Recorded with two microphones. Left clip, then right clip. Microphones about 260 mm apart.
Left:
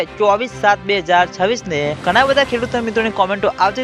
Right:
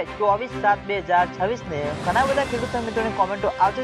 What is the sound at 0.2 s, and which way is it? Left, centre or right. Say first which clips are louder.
Speech: left 6 dB; left.